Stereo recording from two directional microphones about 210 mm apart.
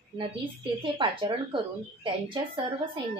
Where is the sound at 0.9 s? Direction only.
25° right (ahead or behind).